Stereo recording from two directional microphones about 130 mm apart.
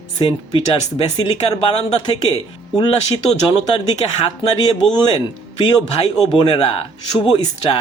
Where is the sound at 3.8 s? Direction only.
45° left (ahead or behind).